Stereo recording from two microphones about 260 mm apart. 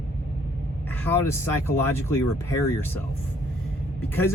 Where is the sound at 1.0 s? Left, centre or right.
Centre.